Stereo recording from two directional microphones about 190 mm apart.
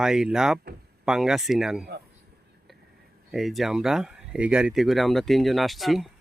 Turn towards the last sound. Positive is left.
turn(degrees=0)  # may be behind; listen again after turning